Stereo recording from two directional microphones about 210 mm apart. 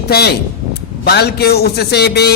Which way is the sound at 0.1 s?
50° left (ahead or behind).